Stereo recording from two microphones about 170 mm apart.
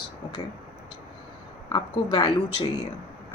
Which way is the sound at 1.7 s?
25° left (ahead or behind).